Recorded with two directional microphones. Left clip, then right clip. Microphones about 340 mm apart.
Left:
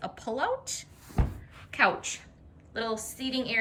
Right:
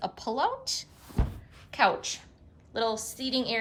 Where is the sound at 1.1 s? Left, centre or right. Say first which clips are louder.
Left 2 dB; centre.